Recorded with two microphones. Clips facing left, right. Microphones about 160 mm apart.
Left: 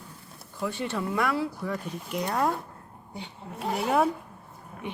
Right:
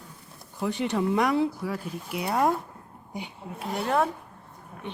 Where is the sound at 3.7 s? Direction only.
5° left (ahead or behind).